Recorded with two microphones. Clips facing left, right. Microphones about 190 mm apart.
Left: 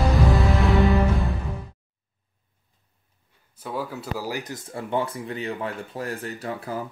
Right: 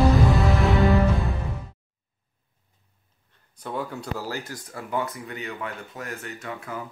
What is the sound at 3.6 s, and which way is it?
Speech, 5° left (ahead or behind).